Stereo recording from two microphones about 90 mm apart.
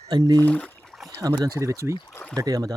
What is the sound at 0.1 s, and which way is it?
Speech, 45° right (ahead or behind).